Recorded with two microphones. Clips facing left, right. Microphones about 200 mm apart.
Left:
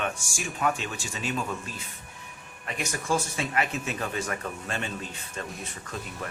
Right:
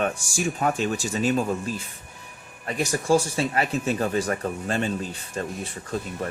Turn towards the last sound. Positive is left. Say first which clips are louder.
# right 7 dB
turn(degrees=-30)  # may be behind; listen again after turning